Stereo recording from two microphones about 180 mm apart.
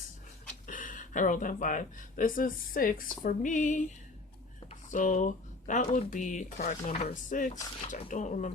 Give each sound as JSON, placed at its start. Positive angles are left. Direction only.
{"t": 0.7, "sound": "speech", "side_deg": 45}